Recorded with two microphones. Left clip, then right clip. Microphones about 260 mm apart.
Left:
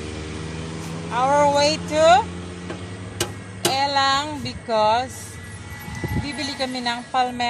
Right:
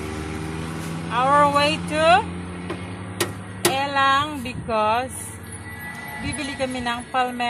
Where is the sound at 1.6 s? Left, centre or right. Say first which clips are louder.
Left 2 dB; centre.